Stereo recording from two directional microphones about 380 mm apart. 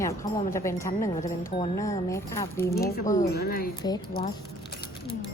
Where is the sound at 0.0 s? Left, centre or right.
Centre.